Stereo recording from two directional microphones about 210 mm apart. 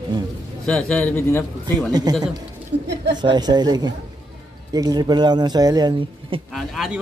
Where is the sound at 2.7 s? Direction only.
35° right (ahead or behind).